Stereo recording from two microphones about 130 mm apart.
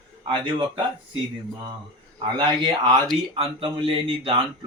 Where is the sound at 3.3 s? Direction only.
45° right (ahead or behind).